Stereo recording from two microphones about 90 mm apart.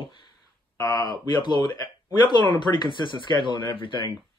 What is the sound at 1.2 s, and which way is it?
Speech, 55° left (ahead or behind).